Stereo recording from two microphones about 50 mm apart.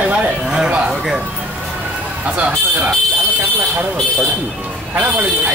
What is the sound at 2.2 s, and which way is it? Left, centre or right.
Speech, right.